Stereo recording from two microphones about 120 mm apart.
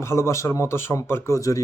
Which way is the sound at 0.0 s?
20° left (ahead or behind).